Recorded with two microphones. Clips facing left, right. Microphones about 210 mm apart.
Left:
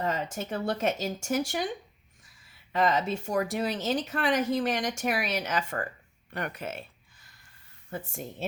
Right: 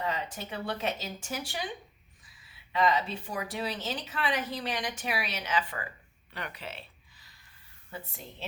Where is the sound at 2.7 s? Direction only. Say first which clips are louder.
Left 2 dB; 45° left (ahead or behind).